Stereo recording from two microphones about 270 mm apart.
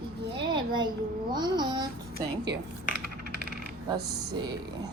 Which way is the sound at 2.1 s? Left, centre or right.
Right.